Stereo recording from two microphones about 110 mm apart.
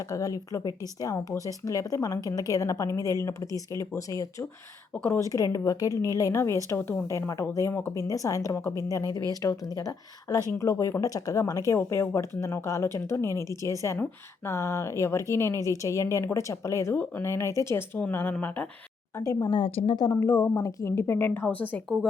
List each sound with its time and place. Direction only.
0.1 s speech: 30° left (ahead or behind)
5.3 s speech: 35° left (ahead or behind); by 18.7 s 15° left (ahead or behind)
19.1 s speech: 25° left (ahead or behind)
19.5 s a woman's voice: 50° left (ahead or behind)
20.1 s speech: 25° left (ahead or behind)